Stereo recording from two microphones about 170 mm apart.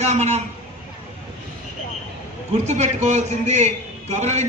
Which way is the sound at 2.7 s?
45° right (ahead or behind).